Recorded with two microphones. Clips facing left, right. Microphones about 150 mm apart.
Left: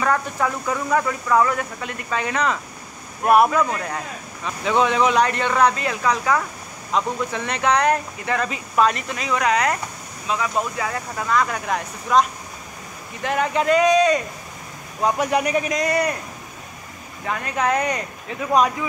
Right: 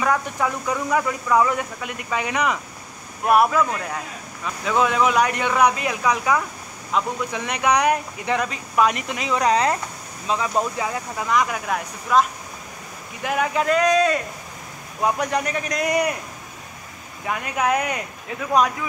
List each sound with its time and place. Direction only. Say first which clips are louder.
0.0 s speech: left 1 dB; 5° right (ahead or behind)
3.3 s speech: left 1 dB; centre (ahead or behind); by 9.4 s 15° right (ahead or behind)
9.4 s speech: right 2 dB; 30° right (ahead or behind)
10.5 s speech: right 1 dB; 15° right (ahead or behind)
11.5 s speech: left 1 dB; 5° right (ahead or behind)
15.3 s speech: left 4 dB; 10° left (ahead or behind)
15.8 s speech: even; 10° right (ahead or behind)
17.3 s speech: even; 10° right (ahead or behind)